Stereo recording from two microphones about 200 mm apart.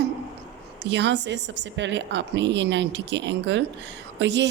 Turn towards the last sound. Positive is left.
turn(degrees=-60)  # may be behind; listen again after turning